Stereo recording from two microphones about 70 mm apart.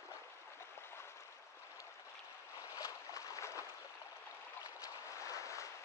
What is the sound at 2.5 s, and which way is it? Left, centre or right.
Boat, left.